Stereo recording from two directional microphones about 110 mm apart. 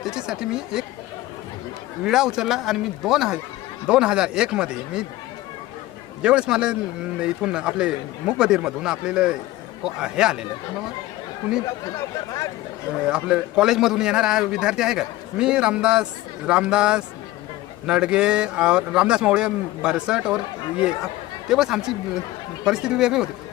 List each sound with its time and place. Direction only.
0.0 s speech: 5° right (ahead or behind)
2.0 s a man's voice: 5° right (ahead or behind)
6.2 s a man's voice: 10° right (ahead or behind)
11.9 s speech: 30° left (ahead or behind)
13.1 s a man's voice: 10° right (ahead or behind)